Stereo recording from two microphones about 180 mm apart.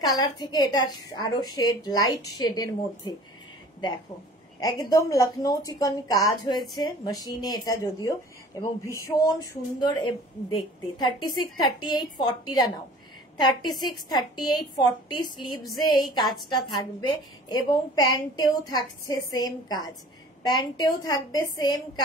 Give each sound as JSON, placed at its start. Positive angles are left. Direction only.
{"t": 0.0, "sound": "a woman's voice", "side_deg": 20}
{"t": 4.6, "sound": "a woman's voice", "side_deg": 20}